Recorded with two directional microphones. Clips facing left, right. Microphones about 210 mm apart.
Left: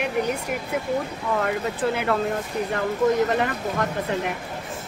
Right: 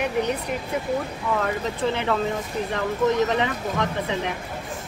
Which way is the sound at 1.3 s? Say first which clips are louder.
Left 2 dB; 5° left (ahead or behind).